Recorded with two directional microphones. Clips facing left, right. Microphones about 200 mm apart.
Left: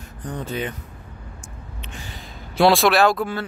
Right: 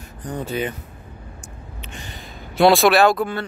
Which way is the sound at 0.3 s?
5° right (ahead or behind).